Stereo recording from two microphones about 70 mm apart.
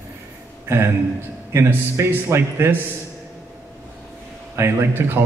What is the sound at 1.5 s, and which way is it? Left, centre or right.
A man's voice, right.